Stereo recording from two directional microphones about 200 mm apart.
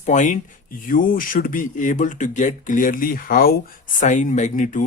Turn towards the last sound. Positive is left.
turn(degrees=40)  # may be behind; listen again after turning